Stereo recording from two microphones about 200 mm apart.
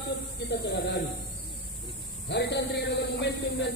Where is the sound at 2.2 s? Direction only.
60° left (ahead or behind).